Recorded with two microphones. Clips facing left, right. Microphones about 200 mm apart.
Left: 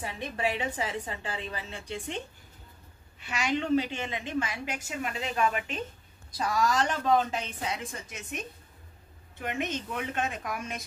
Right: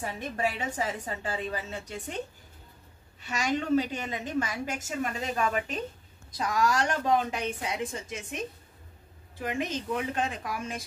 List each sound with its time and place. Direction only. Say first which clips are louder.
0.0 s a woman's voice: right 1 dB; 45° right (ahead or behind)
6.6 s a woman's voice: right 1 dB; 10° right (ahead or behind)
8.1 s a woman's voice: right 3 dB; 30° right (ahead or behind)
9.4 s a woman's voice: right 1 dB; 30° right (ahead or behind)